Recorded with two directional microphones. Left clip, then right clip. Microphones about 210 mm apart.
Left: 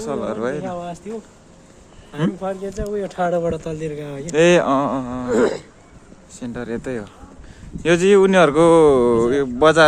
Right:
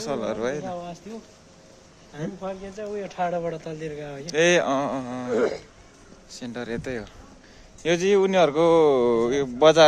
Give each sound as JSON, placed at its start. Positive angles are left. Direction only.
{"t": 0.0, "sound": "speech", "side_deg": -10}
{"t": 0.7, "sound": "speech", "side_deg": 30}
{"t": 2.4, "sound": "speech", "side_deg": 55}
{"t": 4.3, "sound": "speech", "side_deg": 15}
{"t": 5.3, "sound": "speech", "side_deg": 55}
{"t": 6.4, "sound": "speech", "side_deg": 0}